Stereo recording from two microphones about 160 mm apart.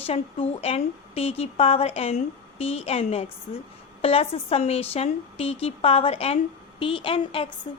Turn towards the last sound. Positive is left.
turn(degrees=35)  # may be behind; listen again after turning